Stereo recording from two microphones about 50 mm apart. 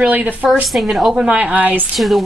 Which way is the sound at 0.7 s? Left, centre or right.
Centre.